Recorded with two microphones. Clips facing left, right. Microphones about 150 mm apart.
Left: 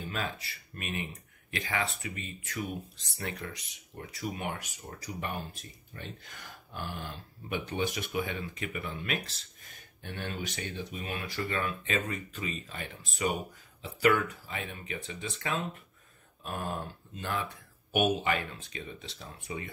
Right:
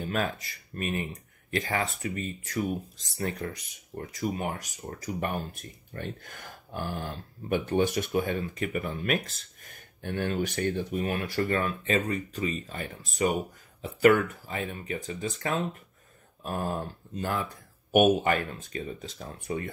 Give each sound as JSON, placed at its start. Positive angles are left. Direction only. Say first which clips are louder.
{"t": 0.1, "sound": "speech", "louder": "right 7 dB", "side_deg": -50}